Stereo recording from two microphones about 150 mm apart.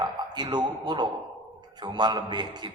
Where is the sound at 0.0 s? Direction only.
30° right (ahead or behind).